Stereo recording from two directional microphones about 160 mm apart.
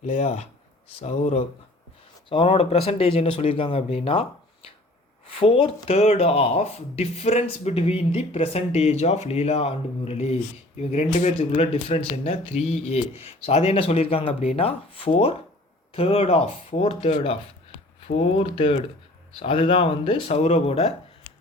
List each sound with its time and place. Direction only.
0.1 s speech: 40° left (ahead or behind)
5.3 s speech: 35° left (ahead or behind)